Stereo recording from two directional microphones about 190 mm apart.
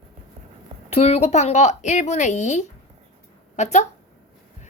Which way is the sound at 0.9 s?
35° left (ahead or behind).